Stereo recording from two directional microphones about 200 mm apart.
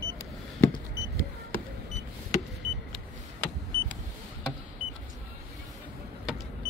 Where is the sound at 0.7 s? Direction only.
15° left (ahead or behind).